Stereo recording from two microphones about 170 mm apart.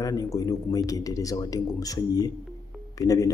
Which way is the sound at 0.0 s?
20° left (ahead or behind).